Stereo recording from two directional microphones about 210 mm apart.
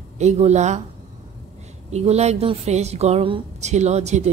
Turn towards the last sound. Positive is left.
turn(degrees=-30)  # may be behind; listen again after turning